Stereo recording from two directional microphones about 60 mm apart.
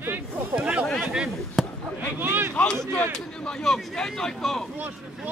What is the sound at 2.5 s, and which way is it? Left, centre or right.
Speech, centre.